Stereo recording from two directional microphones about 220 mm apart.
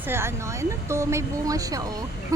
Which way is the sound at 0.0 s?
10° right (ahead or behind).